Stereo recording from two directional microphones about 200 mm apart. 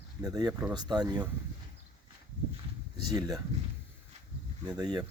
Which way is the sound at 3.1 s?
20° right (ahead or behind).